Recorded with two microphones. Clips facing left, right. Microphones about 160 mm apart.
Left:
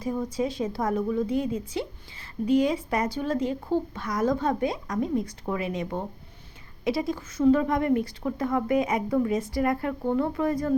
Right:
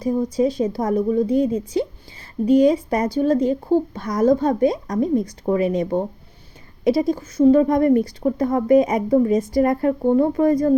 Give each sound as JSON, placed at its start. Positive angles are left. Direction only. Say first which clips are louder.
{"t": 0.0, "sound": "speech", "louder": "right 8 dB", "side_deg": -35}